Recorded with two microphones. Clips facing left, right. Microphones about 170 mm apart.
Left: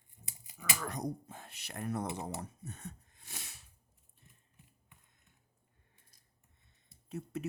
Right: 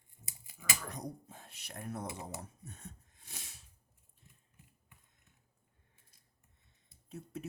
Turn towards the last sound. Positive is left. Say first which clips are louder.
# left 5 dB
turn(degrees=75)  # may be behind; listen again after turning